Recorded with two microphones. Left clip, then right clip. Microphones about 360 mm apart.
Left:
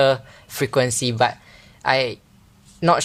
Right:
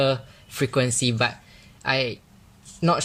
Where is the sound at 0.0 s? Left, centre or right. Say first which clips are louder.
Left 5 dB; centre.